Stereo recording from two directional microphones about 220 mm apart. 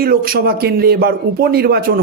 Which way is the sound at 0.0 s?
45° right (ahead or behind).